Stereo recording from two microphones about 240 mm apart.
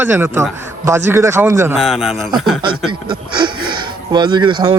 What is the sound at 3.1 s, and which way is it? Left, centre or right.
Speech, centre.